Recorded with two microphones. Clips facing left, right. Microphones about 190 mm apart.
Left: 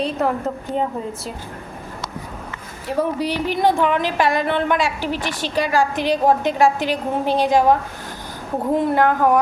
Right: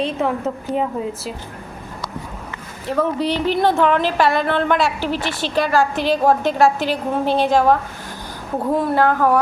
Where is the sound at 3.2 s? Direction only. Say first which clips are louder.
Right 2 dB; 10° left (ahead or behind).